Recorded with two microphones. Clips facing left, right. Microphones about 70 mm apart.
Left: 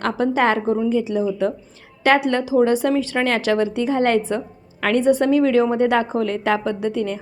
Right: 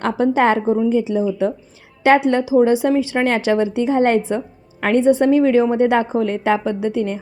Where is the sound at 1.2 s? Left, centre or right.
Centre.